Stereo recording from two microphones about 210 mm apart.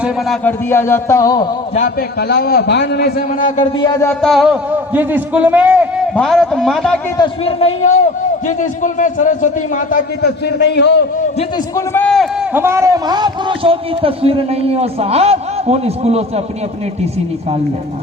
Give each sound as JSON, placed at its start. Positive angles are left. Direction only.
{"t": 0.4, "sound": "a man's voice", "side_deg": 10}
{"t": 1.7, "sound": "a man's voice", "side_deg": 40}
{"t": 3.8, "sound": "a man's voice", "side_deg": 15}
{"t": 7.2, "sound": "a man's voice", "side_deg": 30}
{"t": 11.9, "sound": "a man's voice", "side_deg": 5}
{"t": 12.5, "sound": "a man's voice", "side_deg": -10}